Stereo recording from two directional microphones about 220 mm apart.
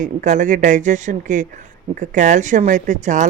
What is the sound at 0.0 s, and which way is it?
Speech, 35° right (ahead or behind).